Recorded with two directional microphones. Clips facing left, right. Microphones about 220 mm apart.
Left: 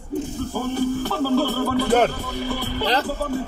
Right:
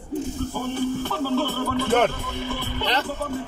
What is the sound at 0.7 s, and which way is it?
A man's voice, 40° left (ahead or behind).